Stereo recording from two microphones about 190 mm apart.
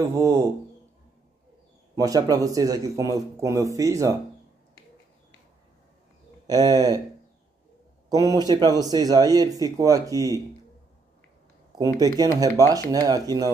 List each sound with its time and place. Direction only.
0.0 s a man's voice: 15° right (ahead or behind)
2.0 s a man's voice: 20° right (ahead or behind)
6.4 s speech: 20° right (ahead or behind)
8.1 s speech: 20° right (ahead or behind)
12.0 s speech: 20° right (ahead or behind)